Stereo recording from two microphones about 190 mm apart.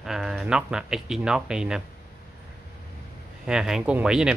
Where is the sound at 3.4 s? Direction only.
5° right (ahead or behind).